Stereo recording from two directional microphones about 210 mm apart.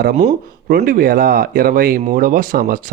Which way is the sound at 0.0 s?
35° right (ahead or behind).